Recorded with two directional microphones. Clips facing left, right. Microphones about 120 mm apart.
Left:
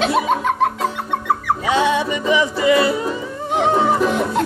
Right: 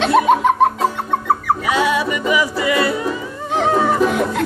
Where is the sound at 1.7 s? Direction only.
25° left (ahead or behind).